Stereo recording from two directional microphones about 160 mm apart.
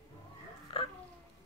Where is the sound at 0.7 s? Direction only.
35° left (ahead or behind).